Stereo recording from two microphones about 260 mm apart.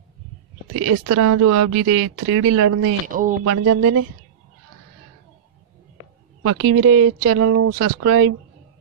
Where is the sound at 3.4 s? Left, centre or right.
Right.